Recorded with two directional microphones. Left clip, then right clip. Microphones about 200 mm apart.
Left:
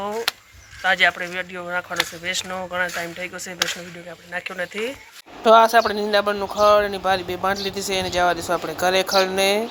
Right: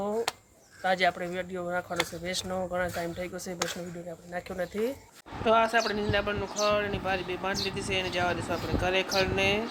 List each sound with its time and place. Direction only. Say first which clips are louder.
0.8 s speech: left 8 dB; 5° right (ahead or behind)
5.5 s speech: left 11 dB; 25° left (ahead or behind)